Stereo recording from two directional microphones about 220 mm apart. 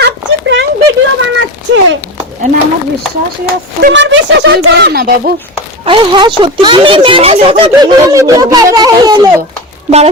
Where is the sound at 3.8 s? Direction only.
55° right (ahead or behind).